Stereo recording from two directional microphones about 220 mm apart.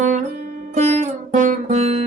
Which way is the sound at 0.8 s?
30° right (ahead or behind).